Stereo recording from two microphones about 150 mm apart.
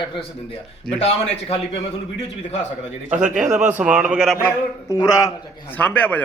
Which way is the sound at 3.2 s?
55° right (ahead or behind).